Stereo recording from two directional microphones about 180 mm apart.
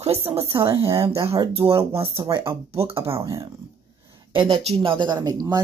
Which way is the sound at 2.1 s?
20° right (ahead or behind).